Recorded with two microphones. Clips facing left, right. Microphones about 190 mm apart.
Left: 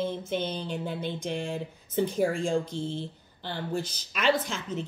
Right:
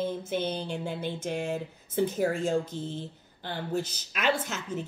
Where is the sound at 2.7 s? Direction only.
10° left (ahead or behind).